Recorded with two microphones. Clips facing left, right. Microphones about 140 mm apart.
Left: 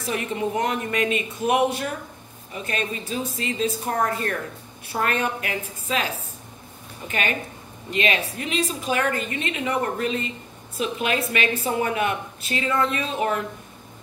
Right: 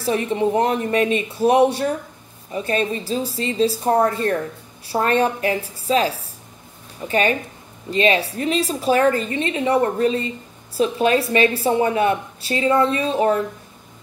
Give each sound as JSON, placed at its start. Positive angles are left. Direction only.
{"t": 0.0, "sound": "a woman's voice", "side_deg": -30}